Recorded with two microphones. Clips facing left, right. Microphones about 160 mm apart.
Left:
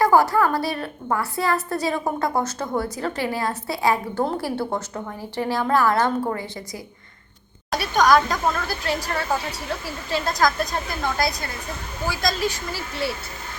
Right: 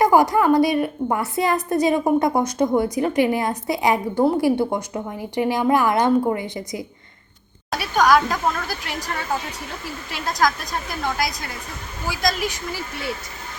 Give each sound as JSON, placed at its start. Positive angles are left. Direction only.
{"t": 0.0, "sound": "a woman's voice", "side_deg": -15}
{"t": 10.1, "sound": "a woman's voice", "side_deg": -10}